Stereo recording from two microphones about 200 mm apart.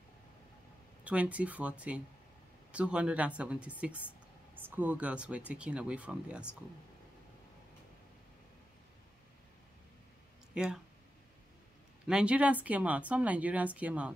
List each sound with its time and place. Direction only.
1.0 s speech: 5° right (ahead or behind)
10.5 s speech: 5° right (ahead or behind)
12.1 s speech: 5° right (ahead or behind)